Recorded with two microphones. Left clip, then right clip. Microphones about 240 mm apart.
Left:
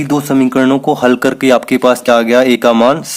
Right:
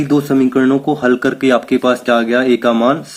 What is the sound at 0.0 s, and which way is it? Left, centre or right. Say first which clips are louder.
Speech: left 1 dB; left.